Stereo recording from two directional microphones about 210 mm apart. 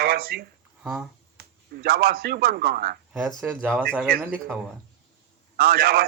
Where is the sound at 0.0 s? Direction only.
45° right (ahead or behind).